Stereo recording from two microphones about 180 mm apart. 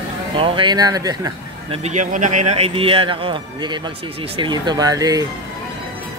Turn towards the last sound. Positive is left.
turn(degrees=-20)  # may be behind; listen again after turning